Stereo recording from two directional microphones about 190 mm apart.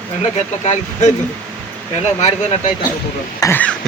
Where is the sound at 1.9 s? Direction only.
35° left (ahead or behind).